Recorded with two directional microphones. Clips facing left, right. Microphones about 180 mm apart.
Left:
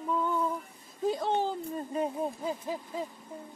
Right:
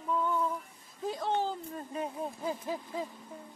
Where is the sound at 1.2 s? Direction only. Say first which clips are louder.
Left 2 dB; 30° left (ahead or behind).